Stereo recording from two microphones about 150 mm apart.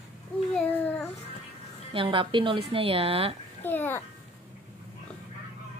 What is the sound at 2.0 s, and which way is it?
A woman's voice, 35° right (ahead or behind).